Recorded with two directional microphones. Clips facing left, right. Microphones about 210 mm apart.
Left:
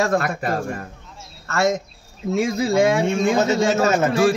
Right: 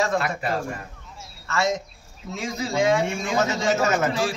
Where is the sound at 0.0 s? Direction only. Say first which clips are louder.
Left 3 dB; 50° left (ahead or behind).